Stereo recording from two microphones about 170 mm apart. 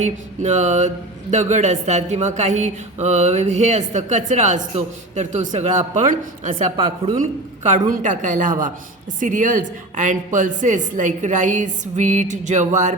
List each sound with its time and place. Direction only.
0.0 s speech: 45° right (ahead or behind)
6.7 s a woman's voice: 35° right (ahead or behind)
7.2 s speech: 50° right (ahead or behind)